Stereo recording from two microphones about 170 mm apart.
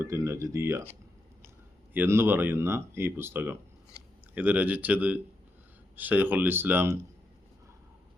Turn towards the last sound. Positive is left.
turn(degrees=-15)  # may be behind; listen again after turning